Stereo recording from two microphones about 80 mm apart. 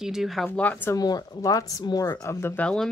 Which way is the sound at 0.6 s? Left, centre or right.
Centre.